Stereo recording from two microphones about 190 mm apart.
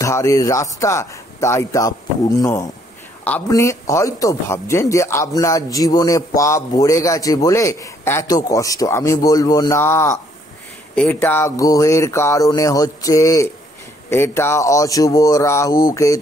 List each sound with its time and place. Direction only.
0.0 s speech: 15° left (ahead or behind)